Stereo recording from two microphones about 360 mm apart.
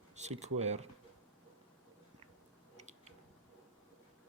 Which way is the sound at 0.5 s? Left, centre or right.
Centre.